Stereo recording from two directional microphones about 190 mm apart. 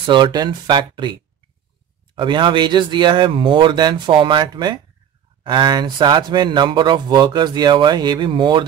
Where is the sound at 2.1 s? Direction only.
25° right (ahead or behind).